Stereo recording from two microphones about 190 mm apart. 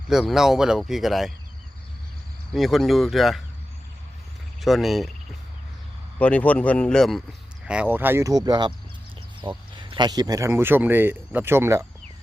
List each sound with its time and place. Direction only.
0.1 s speech: centre (ahead or behind)
2.5 s speech: centre (ahead or behind)
4.6 s speech: centre (ahead or behind)
6.1 s speech: 5° left (ahead or behind); by 11.9 s 15° right (ahead or behind)